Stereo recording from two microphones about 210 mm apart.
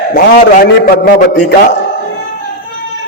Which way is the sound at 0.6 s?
45° left (ahead or behind).